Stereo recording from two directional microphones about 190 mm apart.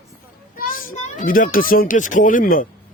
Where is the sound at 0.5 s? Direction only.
50° left (ahead or behind).